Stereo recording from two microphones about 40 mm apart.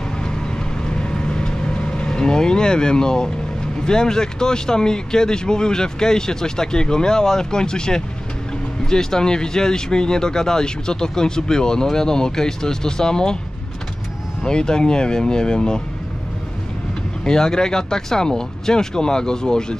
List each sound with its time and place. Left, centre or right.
0.8 s vehicle: left
2.0 s speech: centre
14.4 s speech: centre
17.2 s speech: centre